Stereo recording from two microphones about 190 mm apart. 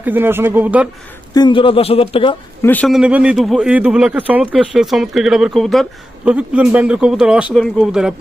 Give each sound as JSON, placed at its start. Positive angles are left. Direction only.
{"t": 0.0, "sound": "speech", "side_deg": -10}
{"t": 1.3, "sound": "a man's voice", "side_deg": 25}
{"t": 2.6, "sound": "a man's voice", "side_deg": 10}